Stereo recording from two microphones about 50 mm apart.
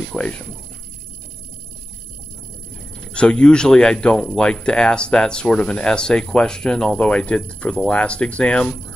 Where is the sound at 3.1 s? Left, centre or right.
Centre.